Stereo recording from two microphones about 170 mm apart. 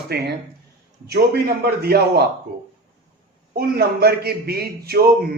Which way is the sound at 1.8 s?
70° right (ahead or behind).